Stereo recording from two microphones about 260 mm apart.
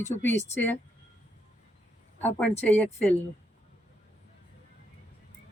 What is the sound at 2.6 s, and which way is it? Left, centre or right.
Speech, centre.